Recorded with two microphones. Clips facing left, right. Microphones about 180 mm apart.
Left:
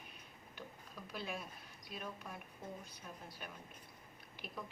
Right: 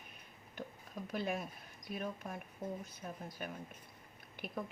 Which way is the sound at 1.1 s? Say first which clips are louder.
Right 7 dB; 50° right (ahead or behind).